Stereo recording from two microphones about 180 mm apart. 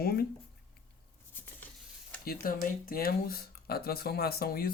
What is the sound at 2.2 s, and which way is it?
Speech, 55° left (ahead or behind).